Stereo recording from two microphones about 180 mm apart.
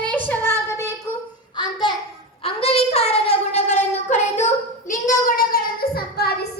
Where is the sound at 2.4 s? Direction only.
35° left (ahead or behind).